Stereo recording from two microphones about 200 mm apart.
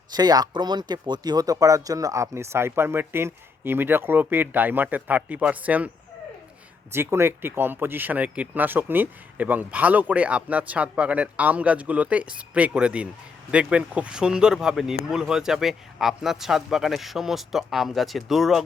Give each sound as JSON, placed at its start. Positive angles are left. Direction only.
{"t": 0.1, "sound": "speech", "side_deg": -20}
{"t": 6.9, "sound": "speech", "side_deg": -10}